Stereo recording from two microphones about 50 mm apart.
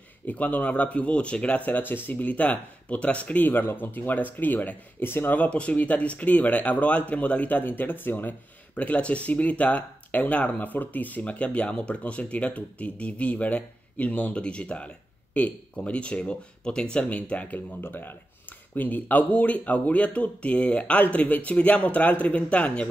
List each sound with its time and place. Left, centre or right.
0.3 s speech: left
3.4 s speech: left
5.0 s speech: left
5.3 s speech: left
8.7 s speech: left
17.7 s speech: left